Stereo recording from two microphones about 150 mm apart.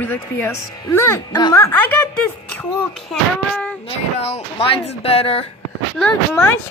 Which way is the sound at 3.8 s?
40° left (ahead or behind).